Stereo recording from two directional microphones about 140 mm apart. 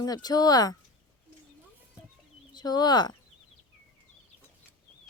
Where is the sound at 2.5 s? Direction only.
30° left (ahead or behind).